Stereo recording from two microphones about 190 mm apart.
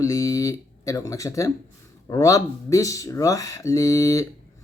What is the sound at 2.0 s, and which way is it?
Speech, 15° left (ahead or behind).